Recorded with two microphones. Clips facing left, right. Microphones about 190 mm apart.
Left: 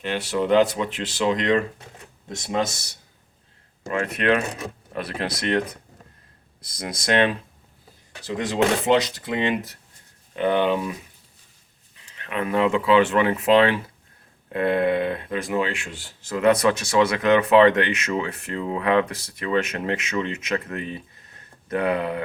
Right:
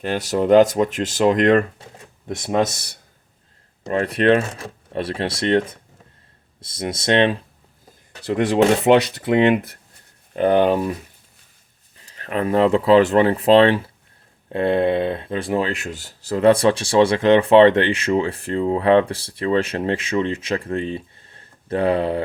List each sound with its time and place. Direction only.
0.0 s speech: 40° right (ahead or behind)
3.8 s speech: 35° right (ahead or behind)
4.4 s speech: 25° left (ahead or behind)
4.9 s speech: 30° right (ahead or behind)
8.2 s speech: 60° right (ahead or behind)
10.3 s speech: 40° right (ahead or behind)
12.0 s speech: 35° right (ahead or behind)